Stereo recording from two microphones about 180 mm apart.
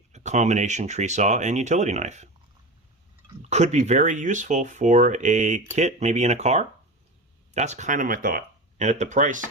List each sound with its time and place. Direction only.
0.1 s speech: 40° right (ahead or behind)
3.5 s speech: 40° right (ahead or behind)